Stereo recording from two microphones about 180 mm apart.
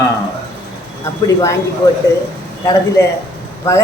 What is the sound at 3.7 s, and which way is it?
Speech, 20° left (ahead or behind).